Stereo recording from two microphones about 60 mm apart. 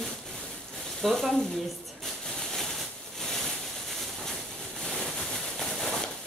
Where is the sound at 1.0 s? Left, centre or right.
Centre.